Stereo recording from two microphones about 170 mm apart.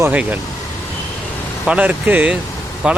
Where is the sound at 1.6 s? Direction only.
5° right (ahead or behind).